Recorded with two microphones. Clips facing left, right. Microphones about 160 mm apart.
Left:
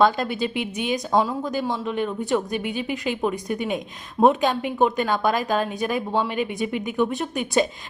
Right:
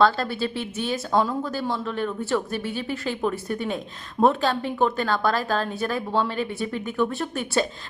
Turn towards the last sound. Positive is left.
turn(degrees=15)  # may be behind; listen again after turning